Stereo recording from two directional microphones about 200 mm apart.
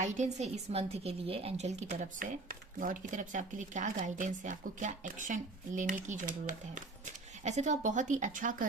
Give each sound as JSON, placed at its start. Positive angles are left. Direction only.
{"t": 0.0, "sound": "a woman's voice", "side_deg": -35}